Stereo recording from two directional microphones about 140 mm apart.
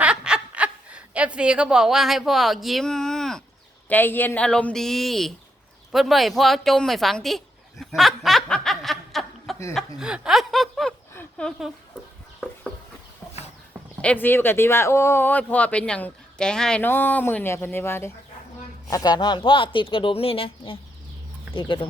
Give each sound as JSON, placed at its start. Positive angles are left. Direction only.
{"t": 0.0, "sound": "snicker", "side_deg": -5}
{"t": 3.8, "sound": "speech", "side_deg": 15}
{"t": 5.9, "sound": "a sound", "side_deg": 0}
{"t": 9.7, "sound": "speech", "side_deg": -5}
{"t": 11.1, "sound": "a sound", "side_deg": 10}
{"t": 14.0, "sound": "speech", "side_deg": 10}
{"t": 18.9, "sound": "speech", "side_deg": 25}